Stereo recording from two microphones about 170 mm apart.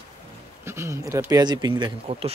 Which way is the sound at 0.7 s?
15° right (ahead or behind).